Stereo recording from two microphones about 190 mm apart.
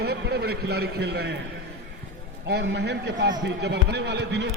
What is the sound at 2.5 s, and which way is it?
A man's voice, 60° right (ahead or behind).